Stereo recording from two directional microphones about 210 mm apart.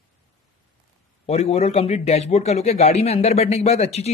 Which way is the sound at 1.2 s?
30° left (ahead or behind).